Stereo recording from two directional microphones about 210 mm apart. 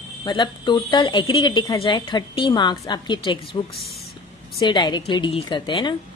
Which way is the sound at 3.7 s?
Centre (ahead or behind).